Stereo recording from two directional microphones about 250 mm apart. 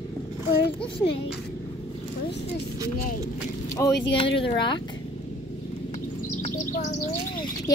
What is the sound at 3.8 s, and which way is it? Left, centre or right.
Speech, centre.